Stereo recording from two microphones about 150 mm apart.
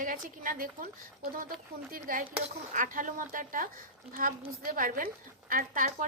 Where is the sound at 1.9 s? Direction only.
70° right (ahead or behind).